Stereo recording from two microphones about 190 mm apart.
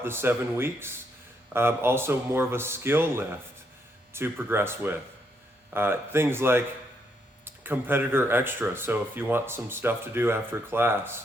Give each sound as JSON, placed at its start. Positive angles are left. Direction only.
{"t": 0.0, "sound": "speech", "side_deg": -10}
{"t": 7.6, "sound": "speech", "side_deg": -10}